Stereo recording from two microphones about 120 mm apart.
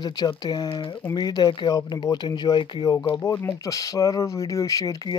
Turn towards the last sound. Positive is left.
turn(degrees=30)  # may be behind; listen again after turning